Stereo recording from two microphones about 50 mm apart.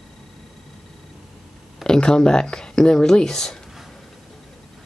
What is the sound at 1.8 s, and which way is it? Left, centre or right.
Speech, centre.